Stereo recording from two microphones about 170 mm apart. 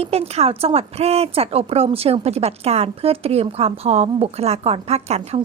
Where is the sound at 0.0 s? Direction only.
35° right (ahead or behind).